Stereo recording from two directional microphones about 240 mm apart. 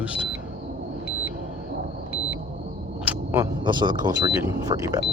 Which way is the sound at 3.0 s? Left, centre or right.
Centre.